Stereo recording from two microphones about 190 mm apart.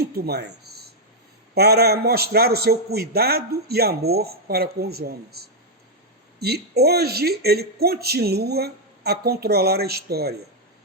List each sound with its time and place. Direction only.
0.0 s speech: 55° right (ahead or behind)